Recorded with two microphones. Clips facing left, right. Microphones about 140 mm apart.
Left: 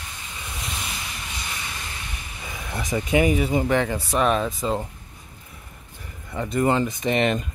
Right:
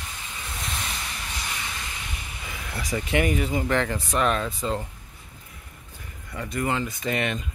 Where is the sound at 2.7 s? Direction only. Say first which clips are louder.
Left 4 dB; 20° left (ahead or behind).